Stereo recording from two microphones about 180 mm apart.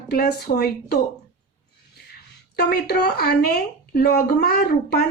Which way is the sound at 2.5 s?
60° left (ahead or behind).